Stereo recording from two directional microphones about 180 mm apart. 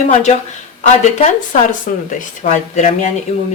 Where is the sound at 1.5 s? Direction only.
45° left (ahead or behind).